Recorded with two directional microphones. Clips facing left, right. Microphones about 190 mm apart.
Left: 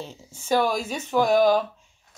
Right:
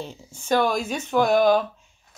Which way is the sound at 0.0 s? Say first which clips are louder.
Right 2 dB; 5° left (ahead or behind).